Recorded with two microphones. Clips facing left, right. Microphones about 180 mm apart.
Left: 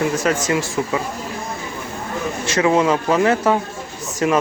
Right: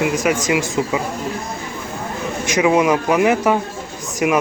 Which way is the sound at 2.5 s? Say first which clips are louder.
Right 1 dB; 15° right (ahead or behind).